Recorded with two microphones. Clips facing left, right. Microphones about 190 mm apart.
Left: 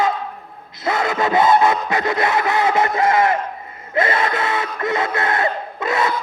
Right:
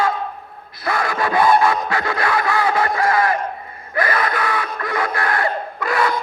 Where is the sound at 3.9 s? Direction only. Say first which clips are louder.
Left 1 dB; 25° left (ahead or behind).